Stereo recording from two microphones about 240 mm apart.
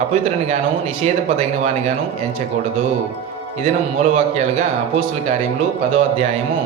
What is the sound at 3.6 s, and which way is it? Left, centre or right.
Speech, right.